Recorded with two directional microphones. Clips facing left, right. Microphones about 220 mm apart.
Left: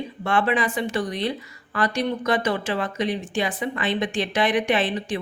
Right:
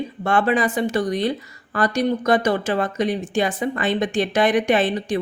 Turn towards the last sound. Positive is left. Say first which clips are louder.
# right 4 dB
turn(degrees=-45)  # may be behind; listen again after turning